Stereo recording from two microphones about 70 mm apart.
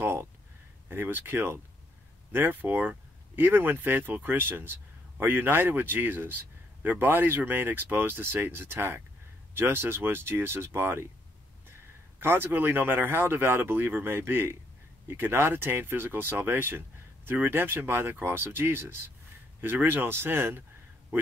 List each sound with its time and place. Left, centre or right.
0.0 s a sound: right
0.8 s speech: right
12.2 s speech: right